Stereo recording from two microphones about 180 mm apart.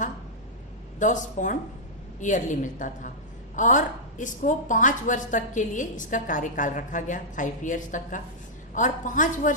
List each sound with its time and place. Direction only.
0.9 s a woman's voice: 45° left (ahead or behind)